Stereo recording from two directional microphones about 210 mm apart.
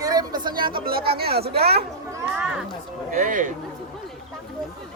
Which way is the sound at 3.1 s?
40° right (ahead or behind).